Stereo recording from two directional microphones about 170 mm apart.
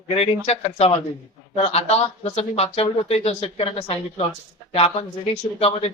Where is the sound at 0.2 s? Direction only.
35° left (ahead or behind).